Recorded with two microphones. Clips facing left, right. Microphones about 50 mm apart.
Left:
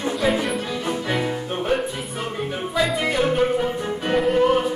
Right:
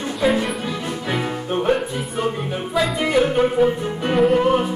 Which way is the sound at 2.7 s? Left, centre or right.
Centre.